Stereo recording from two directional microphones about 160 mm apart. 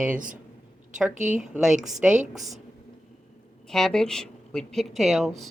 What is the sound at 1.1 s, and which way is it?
Speech, 50° right (ahead or behind).